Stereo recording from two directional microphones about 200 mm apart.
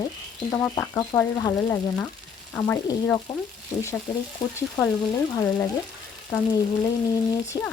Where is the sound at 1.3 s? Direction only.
20° left (ahead or behind).